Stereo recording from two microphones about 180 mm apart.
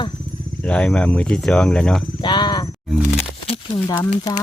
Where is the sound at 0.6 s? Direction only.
5° left (ahead or behind).